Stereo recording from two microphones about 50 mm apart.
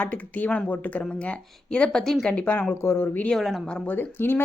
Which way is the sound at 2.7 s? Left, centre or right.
Left.